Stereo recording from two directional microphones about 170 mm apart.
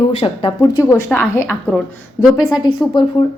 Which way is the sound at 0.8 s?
15° left (ahead or behind).